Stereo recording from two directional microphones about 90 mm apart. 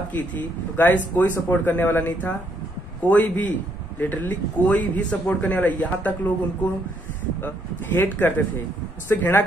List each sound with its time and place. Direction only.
0.1 s a man's voice: 20° left (ahead or behind)
7.3 s speech: 20° left (ahead or behind)